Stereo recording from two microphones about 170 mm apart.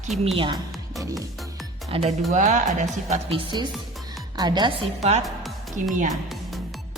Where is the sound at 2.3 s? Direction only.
45° right (ahead or behind).